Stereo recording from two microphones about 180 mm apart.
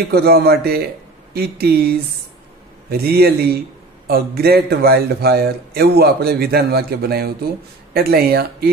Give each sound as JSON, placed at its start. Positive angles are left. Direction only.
{"t": 0.1, "sound": "a man's voice", "side_deg": -60}